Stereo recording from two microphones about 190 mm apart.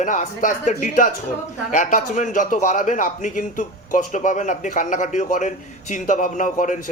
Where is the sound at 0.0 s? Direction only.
40° left (ahead or behind).